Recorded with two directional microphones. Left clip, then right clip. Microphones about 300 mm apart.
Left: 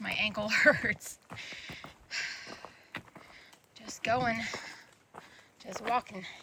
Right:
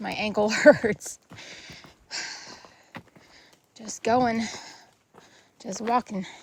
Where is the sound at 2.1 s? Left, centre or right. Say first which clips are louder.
Right 2 dB; centre.